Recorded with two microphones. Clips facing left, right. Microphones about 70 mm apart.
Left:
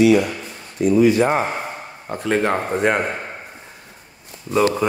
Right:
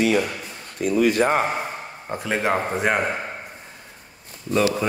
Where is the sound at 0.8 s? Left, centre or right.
Left.